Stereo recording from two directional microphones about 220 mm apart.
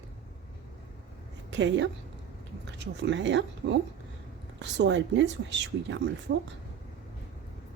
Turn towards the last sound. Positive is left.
turn(degrees=-55)  # may be behind; listen again after turning